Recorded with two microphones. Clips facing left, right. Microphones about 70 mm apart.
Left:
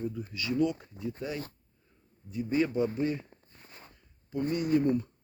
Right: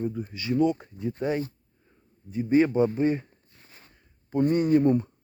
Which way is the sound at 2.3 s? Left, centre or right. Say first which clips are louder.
Right 7 dB; right.